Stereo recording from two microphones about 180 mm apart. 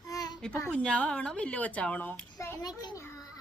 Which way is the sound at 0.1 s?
20° left (ahead or behind).